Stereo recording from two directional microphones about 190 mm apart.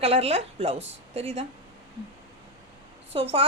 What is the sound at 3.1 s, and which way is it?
Speech, 30° right (ahead or behind).